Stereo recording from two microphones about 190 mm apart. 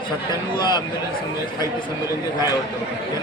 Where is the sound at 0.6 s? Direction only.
25° left (ahead or behind).